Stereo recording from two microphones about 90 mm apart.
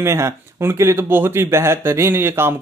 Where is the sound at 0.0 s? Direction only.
30° right (ahead or behind).